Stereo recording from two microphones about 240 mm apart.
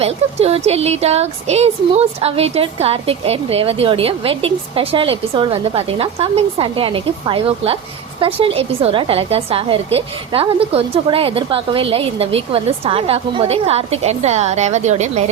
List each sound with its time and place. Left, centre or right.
0.0 s speech: right